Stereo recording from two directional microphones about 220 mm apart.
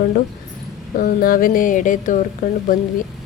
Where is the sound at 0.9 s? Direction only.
40° left (ahead or behind).